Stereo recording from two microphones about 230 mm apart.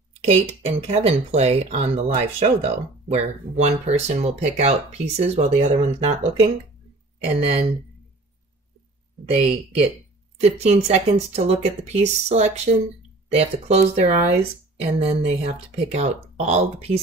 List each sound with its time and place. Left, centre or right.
0.2 s speech: right
7.3 s speech: right
9.3 s speech: right